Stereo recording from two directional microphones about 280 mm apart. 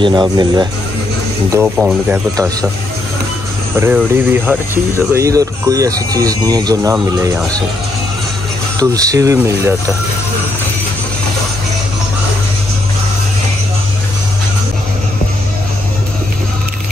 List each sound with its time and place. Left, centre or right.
0.0 s speech: centre
3.7 s speech: centre
8.7 s speech: centre